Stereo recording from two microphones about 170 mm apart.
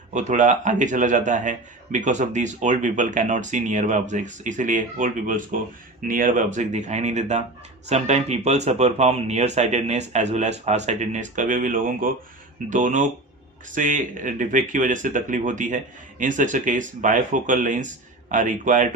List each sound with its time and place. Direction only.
0.1 s a man's voice: 45° right (ahead or behind)